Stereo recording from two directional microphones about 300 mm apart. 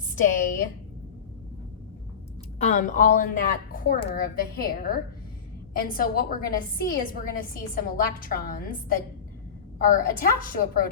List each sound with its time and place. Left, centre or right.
0.2 s speech: left
2.6 s speech: left